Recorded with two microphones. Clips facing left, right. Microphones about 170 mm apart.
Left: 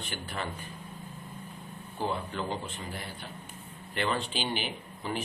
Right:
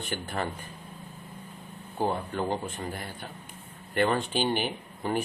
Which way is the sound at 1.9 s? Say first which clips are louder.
Right 4 dB; 45° right (ahead or behind).